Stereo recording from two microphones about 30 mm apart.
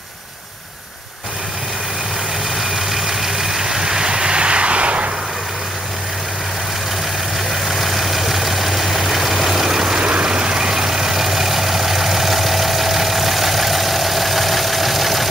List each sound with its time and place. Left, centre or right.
2.7 s vehicle: centre; by 5.1 s right
7.6 s vehicle: centre
9.9 s vehicle: right; by 15.2 s centre